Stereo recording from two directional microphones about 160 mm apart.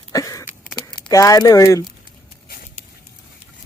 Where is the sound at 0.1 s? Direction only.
20° left (ahead or behind).